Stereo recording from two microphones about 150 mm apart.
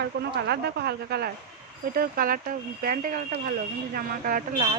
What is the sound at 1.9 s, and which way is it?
Speech, 70° right (ahead or behind).